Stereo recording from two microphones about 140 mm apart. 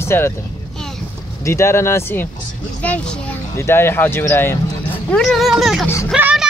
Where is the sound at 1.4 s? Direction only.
20° left (ahead or behind).